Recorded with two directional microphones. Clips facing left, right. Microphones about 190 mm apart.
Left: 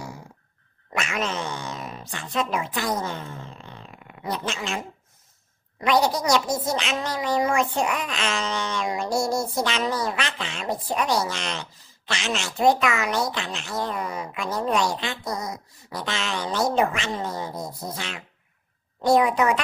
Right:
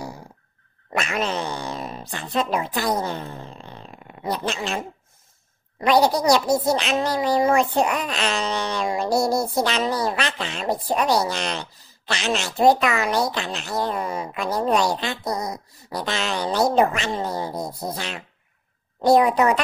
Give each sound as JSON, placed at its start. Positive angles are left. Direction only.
{"t": 0.9, "sound": "speech", "side_deg": -35}